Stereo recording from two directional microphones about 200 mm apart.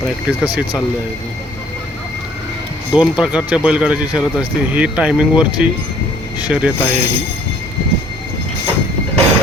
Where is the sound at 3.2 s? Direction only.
5° right (ahead or behind).